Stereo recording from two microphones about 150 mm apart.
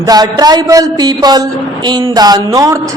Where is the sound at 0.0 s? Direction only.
25° right (ahead or behind).